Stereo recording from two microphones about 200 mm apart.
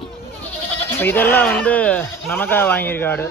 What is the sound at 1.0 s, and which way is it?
A man's voice, 10° left (ahead or behind).